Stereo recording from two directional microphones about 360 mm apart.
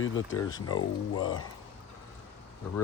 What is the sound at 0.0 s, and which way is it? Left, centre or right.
Speech, left.